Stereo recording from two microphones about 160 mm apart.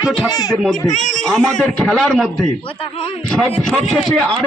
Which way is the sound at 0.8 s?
50° left (ahead or behind).